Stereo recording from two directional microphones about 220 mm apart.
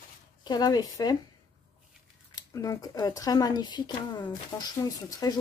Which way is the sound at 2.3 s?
15° left (ahead or behind).